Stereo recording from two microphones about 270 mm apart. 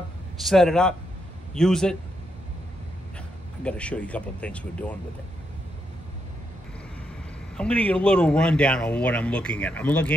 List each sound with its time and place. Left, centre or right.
0.4 s speech: centre
3.6 s speech: centre
7.5 s speech: centre